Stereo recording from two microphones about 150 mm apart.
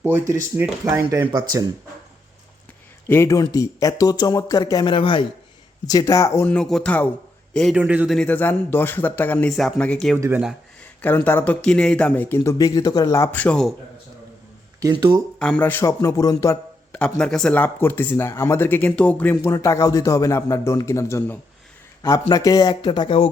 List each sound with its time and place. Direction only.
0.0 s speech: 15° right (ahead or behind)
1.3 s speech: 25° right (ahead or behind)
3.1 s a man's voice: 20° left (ahead or behind); by 7.8 s centre (ahead or behind)
7.8 s speech: 10° right (ahead or behind)
8.1 s speech: 10° left (ahead or behind)
9.5 s speech: centre (ahead or behind)
10.2 s speech: 15° right (ahead or behind)
11.0 s speech: 15° left (ahead or behind)
14.8 s speech: 25° right (ahead or behind)
15.4 s speech: 10° left (ahead or behind); by 16.6 s 25° left (ahead or behind)
16.9 s speech: 5° left (ahead or behind); by 23.3 s 35° left (ahead or behind)